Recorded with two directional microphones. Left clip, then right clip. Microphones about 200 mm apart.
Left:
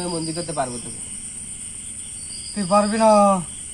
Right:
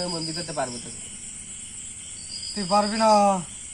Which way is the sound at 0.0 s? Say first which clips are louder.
Left 3 dB; 15° right (ahead or behind).